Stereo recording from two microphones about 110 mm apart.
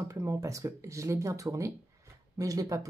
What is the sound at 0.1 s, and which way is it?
Speech, 30° right (ahead or behind).